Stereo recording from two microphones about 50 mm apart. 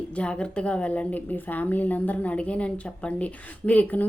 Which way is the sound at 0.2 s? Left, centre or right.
Left.